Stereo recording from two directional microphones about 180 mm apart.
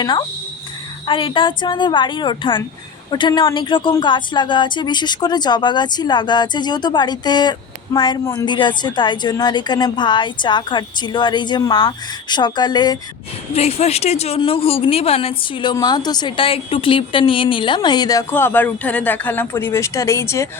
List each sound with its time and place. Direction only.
0.0 s a woman's voice: 25° left (ahead or behind)
13.5 s a woman's voice: 35° left (ahead or behind); by 20.5 s 15° left (ahead or behind)